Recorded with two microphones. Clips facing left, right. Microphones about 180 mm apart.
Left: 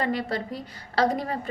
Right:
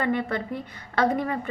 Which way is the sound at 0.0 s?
35° left (ahead or behind).